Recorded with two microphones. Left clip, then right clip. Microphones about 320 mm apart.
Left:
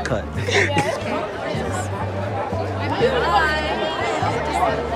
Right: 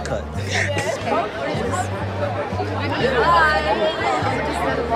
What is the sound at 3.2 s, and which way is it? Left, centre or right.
Speech, centre.